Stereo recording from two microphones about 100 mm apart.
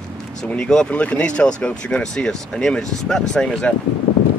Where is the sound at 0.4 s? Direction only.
10° left (ahead or behind).